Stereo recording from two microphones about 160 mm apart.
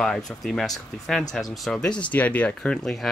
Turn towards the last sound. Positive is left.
turn(degrees=5)  # may be behind; listen again after turning